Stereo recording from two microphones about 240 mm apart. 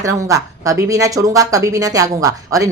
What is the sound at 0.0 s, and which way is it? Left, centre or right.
Speech, centre.